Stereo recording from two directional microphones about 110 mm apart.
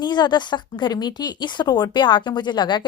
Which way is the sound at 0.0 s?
40° left (ahead or behind).